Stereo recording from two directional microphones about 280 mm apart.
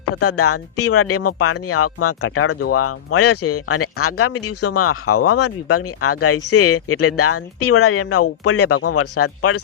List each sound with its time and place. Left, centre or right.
0.2 s speech: left